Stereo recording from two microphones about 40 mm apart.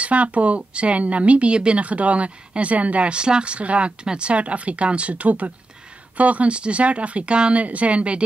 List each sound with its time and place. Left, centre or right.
0.0 s speech: right